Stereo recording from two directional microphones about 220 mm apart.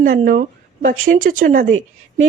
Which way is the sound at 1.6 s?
65° right (ahead or behind).